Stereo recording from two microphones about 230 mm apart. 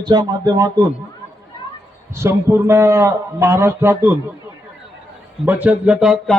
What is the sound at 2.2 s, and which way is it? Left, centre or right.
A man's voice, centre.